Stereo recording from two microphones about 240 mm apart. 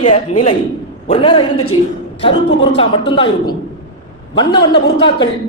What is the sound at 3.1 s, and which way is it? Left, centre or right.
Speech, centre.